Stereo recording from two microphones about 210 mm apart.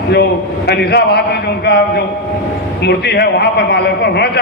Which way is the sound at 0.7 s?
50° left (ahead or behind).